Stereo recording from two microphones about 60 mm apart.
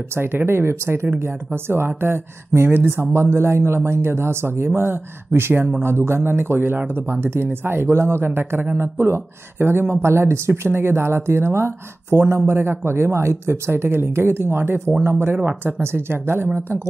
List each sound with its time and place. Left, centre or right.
0.1 s speech: right
15.3 s speech: right
15.8 s speech: right